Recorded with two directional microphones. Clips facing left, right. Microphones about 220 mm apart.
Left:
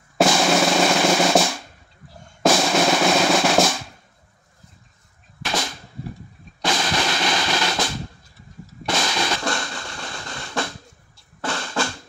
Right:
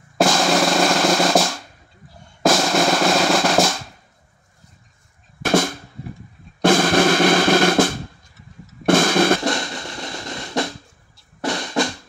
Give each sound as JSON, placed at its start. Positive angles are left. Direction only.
{"t": 0.2, "sound": "drum", "side_deg": 5}
{"t": 5.4, "sound": "drum", "side_deg": -50}
{"t": 9.4, "sound": "music", "side_deg": -20}